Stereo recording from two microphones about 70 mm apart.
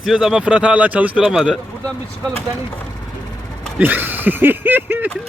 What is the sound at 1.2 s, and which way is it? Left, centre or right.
Speech, centre.